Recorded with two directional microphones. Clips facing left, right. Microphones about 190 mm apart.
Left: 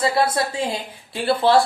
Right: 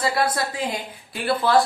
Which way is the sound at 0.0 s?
25° left (ahead or behind).